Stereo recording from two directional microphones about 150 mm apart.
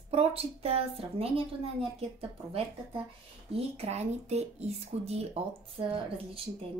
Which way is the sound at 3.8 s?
45° right (ahead or behind).